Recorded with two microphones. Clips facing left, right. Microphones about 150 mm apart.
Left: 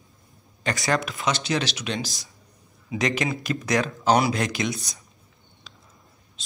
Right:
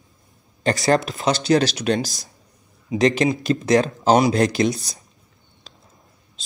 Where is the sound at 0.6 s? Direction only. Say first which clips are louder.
Right 7 dB; 35° right (ahead or behind).